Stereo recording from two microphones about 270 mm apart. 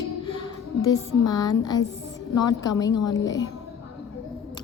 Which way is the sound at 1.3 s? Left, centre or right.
Centre.